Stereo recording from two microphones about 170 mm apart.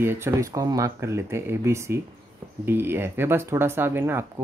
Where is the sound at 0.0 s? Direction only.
15° right (ahead or behind).